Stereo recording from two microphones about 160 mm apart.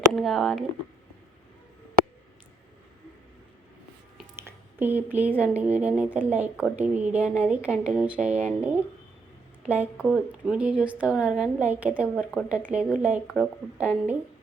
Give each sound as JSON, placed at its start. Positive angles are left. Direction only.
{"t": 0.1, "sound": "speech", "side_deg": 0}
{"t": 4.4, "sound": "speech", "side_deg": -15}